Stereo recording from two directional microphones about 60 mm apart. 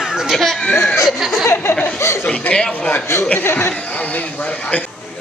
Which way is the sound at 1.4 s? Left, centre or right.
Left.